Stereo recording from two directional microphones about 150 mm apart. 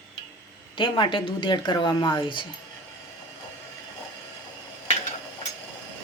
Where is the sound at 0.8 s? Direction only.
35° left (ahead or behind).